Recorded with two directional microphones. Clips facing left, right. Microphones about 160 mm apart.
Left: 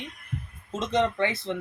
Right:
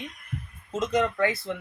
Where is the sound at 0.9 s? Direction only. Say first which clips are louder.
Even; 25° left (ahead or behind).